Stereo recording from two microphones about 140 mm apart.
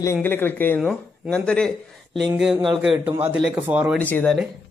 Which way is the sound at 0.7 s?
5° left (ahead or behind).